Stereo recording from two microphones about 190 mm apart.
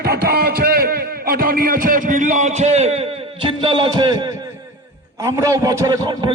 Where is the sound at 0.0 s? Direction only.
55° right (ahead or behind); by 4.4 s 25° right (ahead or behind).